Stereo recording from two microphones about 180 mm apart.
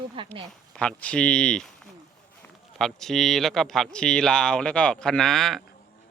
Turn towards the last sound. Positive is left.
turn(degrees=0)  # may be behind; listen again after turning